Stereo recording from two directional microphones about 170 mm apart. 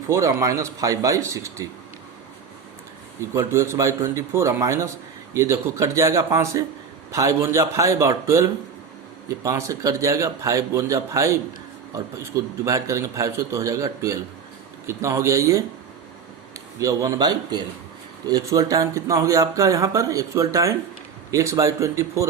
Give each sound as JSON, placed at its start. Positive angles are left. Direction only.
{"t": 0.1, "sound": "a man's voice", "side_deg": -15}
{"t": 3.2, "sound": "a man's voice", "side_deg": -15}
{"t": 16.8, "sound": "a man's voice", "side_deg": -20}